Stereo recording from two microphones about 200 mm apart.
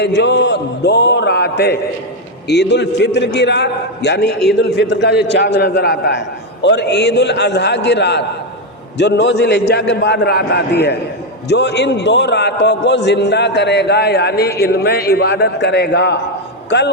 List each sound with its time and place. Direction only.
0.0 s a man's voice: 60° left (ahead or behind)